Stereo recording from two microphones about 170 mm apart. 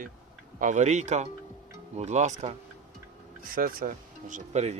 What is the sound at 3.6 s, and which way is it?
Speech, 55° right (ahead or behind).